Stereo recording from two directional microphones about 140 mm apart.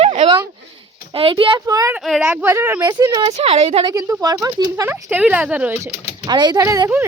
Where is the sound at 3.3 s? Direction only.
45° right (ahead or behind).